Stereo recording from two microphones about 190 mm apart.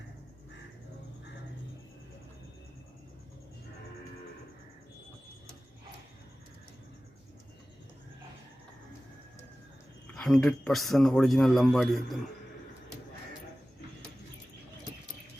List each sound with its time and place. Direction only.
10.2 s a man's voice: centre (ahead or behind)